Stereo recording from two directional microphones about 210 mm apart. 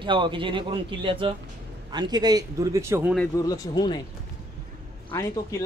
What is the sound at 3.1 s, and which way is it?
Speech, 10° left (ahead or behind).